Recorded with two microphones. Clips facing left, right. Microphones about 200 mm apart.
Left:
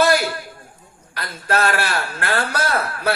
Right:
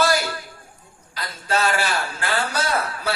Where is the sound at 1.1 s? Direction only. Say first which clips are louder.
Left 2 dB; 60° left (ahead or behind).